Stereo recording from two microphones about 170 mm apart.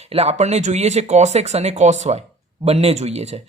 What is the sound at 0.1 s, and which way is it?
A woman's voice, 40° right (ahead or behind).